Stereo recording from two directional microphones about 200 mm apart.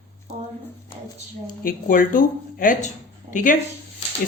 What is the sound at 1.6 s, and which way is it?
Speech, 45° left (ahead or behind).